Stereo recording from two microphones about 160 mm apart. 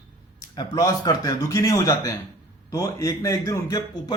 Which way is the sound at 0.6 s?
20° left (ahead or behind).